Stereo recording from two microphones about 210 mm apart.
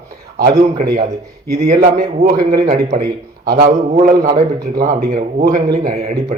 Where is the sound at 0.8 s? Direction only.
35° right (ahead or behind).